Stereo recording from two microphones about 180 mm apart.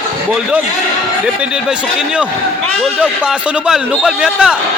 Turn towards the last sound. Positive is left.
turn(degrees=-5)  # may be behind; listen again after turning